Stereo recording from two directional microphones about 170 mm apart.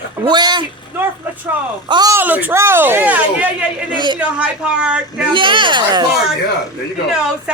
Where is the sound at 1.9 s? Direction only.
20° right (ahead or behind).